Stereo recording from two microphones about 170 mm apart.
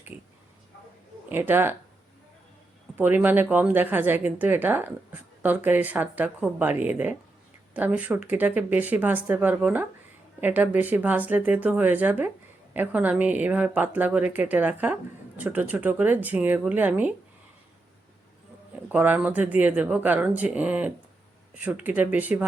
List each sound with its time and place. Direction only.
1.3 s a woman's voice: 10° right (ahead or behind)
2.9 s a woman's voice: 10° right (ahead or behind)
18.9 s a woman's voice: 10° right (ahead or behind)